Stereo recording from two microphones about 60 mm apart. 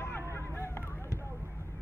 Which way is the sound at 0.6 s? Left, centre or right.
Left.